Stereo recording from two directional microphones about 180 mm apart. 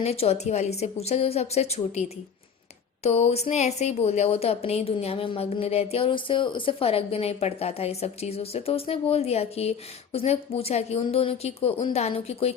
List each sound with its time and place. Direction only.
0.0 s speech: 35° left (ahead or behind)